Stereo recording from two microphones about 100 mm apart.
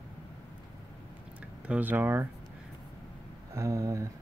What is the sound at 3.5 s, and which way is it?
Speech, 30° right (ahead or behind).